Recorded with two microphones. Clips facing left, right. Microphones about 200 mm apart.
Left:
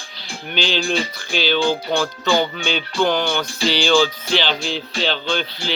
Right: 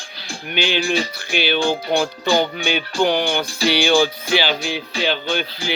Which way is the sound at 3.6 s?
60° right (ahead or behind).